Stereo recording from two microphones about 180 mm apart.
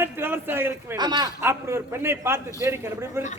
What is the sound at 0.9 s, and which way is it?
A man's voice, 25° right (ahead or behind).